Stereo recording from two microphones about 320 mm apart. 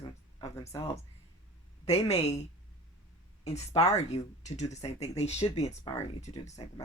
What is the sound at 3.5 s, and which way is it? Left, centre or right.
Speech, centre.